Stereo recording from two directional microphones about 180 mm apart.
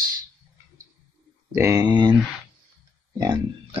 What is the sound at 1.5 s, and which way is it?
Speech, 15° right (ahead or behind).